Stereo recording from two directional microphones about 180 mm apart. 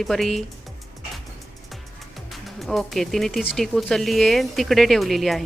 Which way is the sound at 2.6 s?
Centre (ahead or behind).